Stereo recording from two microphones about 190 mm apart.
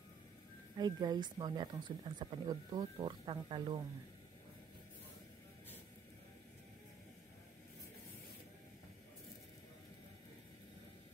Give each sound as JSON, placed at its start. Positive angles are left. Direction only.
{"t": 0.7, "sound": "speech", "side_deg": -20}